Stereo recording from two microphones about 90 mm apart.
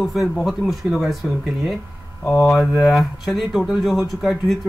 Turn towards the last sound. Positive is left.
turn(degrees=0)  # may be behind; listen again after turning